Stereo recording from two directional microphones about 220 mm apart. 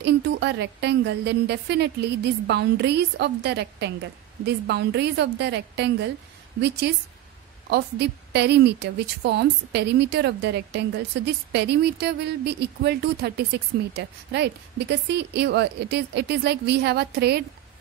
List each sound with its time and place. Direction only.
0.0 s speech: 50° right (ahead or behind)